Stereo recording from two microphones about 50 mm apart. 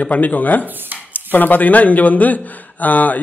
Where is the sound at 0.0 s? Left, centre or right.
Left.